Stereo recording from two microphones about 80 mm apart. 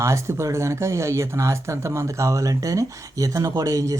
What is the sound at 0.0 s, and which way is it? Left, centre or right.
Speech, right.